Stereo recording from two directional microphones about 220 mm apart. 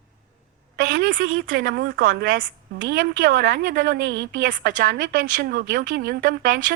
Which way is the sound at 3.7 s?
55° right (ahead or behind).